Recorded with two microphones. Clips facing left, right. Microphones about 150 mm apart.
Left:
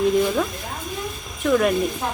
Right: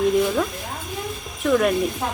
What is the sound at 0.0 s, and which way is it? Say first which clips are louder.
A woman's voice: even; centre (ahead or behind).